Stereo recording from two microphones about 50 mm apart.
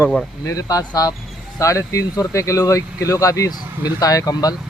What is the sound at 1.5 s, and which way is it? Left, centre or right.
Speech, left.